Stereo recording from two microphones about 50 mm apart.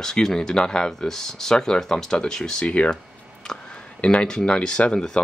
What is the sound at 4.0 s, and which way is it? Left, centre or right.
Speech, left.